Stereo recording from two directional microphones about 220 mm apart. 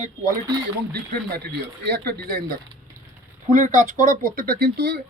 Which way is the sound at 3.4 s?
35° right (ahead or behind).